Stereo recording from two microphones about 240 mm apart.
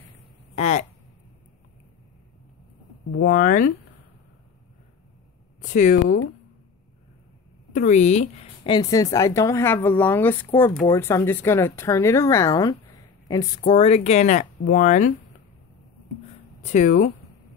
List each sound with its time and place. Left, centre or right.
0.6 s speech: left
3.1 s speech: left
5.6 s speech: left
7.7 s speech: left
16.6 s speech: left